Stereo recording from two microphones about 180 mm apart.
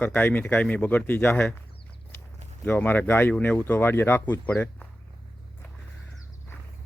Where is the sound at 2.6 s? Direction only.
10° left (ahead or behind).